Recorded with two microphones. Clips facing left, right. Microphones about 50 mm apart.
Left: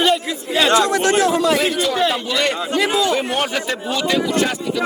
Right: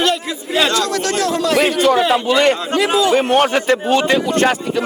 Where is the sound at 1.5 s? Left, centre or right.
Right.